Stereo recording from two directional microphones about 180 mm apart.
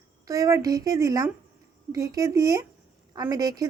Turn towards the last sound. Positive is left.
turn(degrees=-20)  # may be behind; listen again after turning